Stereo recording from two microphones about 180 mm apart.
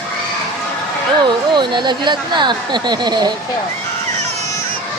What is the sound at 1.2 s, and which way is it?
Speech, 25° right (ahead or behind).